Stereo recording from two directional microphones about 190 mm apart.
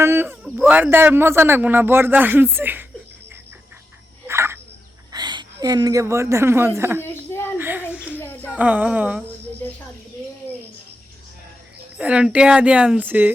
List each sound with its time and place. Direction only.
0.0 s a man's voice: 10° right (ahead or behind)
0.4 s a man's voice: centre (ahead or behind)
4.3 s bird: 15° right (ahead or behind)
5.1 s a woman's voice: 25° right (ahead or behind)
7.0 s a sound: 10° left (ahead or behind)
7.6 s a sound: 10° right (ahead or behind)
8.1 s a sound: 10° left (ahead or behind)
8.5 s a man's voice: 5° right (ahead or behind)
11.9 s a man's voice: 5° right (ahead or behind)